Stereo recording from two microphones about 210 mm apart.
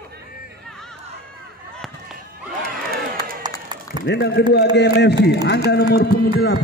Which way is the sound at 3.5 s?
20° right (ahead or behind).